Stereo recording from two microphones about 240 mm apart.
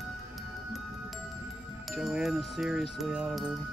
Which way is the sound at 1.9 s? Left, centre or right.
Centre.